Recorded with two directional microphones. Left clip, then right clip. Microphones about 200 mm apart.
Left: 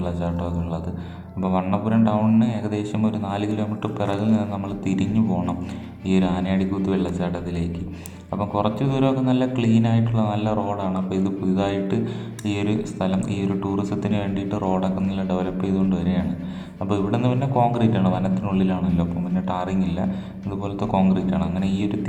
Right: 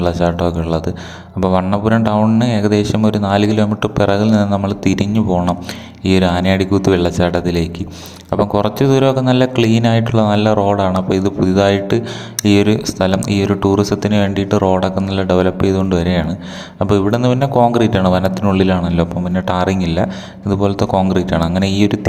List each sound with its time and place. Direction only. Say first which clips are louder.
0.0 s speech: right 13 dB; 50° right (ahead or behind)